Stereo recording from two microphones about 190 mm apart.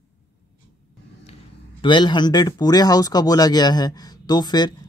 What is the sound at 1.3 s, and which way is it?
Speech, 25° left (ahead or behind).